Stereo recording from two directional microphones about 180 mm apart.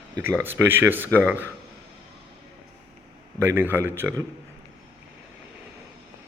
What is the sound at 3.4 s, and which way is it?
Speech, 15° right (ahead or behind).